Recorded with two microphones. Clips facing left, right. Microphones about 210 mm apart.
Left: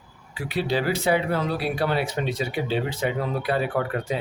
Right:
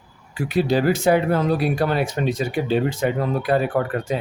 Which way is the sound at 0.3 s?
45° right (ahead or behind).